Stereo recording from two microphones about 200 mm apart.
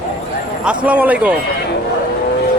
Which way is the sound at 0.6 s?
5° right (ahead or behind).